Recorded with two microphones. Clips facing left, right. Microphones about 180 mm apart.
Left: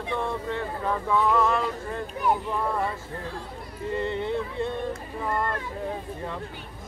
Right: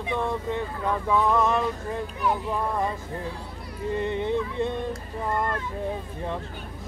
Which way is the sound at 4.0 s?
20° right (ahead or behind).